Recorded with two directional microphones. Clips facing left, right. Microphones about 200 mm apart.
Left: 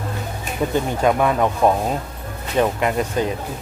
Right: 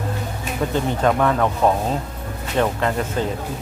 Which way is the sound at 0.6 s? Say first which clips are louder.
Left 1 dB; 10° left (ahead or behind).